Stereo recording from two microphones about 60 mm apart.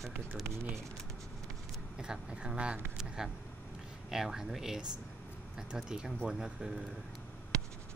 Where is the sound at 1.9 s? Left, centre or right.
Centre.